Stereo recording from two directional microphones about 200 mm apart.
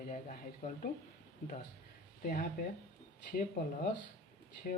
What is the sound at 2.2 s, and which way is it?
Speech, 45° left (ahead or behind).